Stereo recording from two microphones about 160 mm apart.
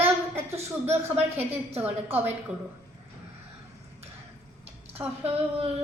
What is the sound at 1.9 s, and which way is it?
Speech, 10° right (ahead or behind).